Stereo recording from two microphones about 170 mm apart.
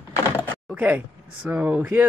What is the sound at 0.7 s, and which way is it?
Speech, 10° right (ahead or behind).